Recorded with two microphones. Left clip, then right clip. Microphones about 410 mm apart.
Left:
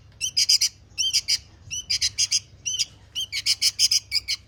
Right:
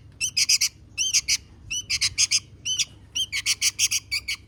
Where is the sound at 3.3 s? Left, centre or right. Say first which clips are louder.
Left 3 dB; centre.